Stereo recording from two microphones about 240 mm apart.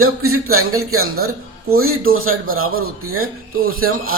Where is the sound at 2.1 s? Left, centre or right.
Right.